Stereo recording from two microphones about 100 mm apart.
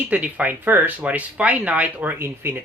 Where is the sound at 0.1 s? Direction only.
15° right (ahead or behind).